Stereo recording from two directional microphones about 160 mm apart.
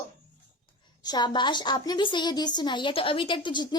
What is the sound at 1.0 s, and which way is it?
A woman's voice, 25° left (ahead or behind).